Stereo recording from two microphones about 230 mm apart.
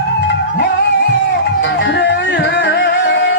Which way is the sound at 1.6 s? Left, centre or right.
Left.